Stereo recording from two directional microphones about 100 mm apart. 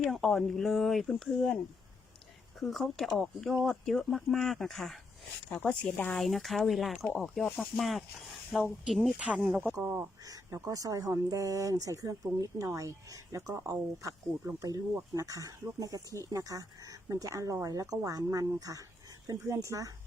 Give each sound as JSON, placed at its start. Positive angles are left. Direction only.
{"t": 0.0, "sound": "speech", "side_deg": 5}
{"t": 2.6, "sound": "speech", "side_deg": 0}
{"t": 6.2, "sound": "speech", "side_deg": 0}
{"t": 9.7, "sound": "speech", "side_deg": -25}
{"t": 10.2, "sound": "speech", "side_deg": -35}